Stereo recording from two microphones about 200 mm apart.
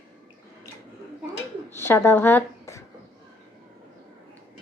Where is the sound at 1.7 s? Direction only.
10° left (ahead or behind).